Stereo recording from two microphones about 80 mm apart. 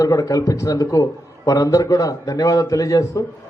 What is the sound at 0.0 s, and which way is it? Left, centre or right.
A man's voice, left.